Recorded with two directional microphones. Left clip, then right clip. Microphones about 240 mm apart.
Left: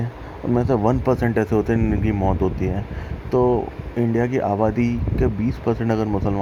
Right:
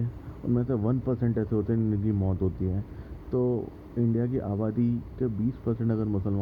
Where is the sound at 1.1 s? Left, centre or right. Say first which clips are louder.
Left 10 dB; left.